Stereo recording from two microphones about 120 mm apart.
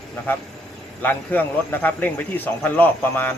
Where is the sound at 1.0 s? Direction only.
15° left (ahead or behind).